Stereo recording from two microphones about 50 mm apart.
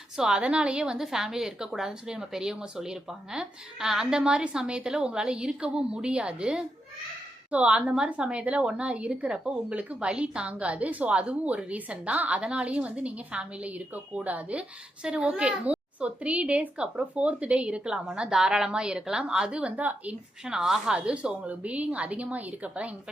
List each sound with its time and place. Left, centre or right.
0.2 s a woman's voice: centre; by 20.1 s right
20.4 s a woman's voice: centre
20.9 s a woman's voice: right